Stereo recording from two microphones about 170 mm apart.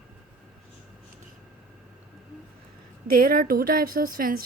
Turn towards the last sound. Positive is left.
turn(degrees=-60)  # may be behind; listen again after turning